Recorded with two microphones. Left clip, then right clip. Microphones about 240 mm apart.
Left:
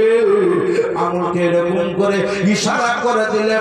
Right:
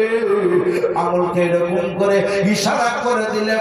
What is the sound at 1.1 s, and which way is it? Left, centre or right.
A man's voice, right.